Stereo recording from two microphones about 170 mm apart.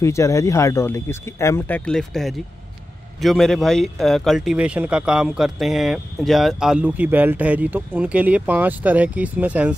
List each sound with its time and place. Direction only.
0.0 s speech: 15° left (ahead or behind); by 9.8 s 10° right (ahead or behind)